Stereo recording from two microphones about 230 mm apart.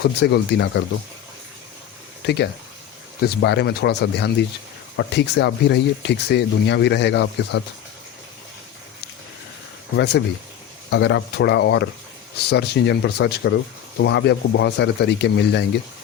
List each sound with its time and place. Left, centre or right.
0.0 s speech: left
2.2 s speech: left
10.0 s speech: left